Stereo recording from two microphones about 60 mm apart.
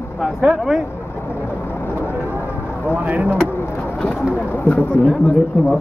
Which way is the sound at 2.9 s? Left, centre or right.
Right.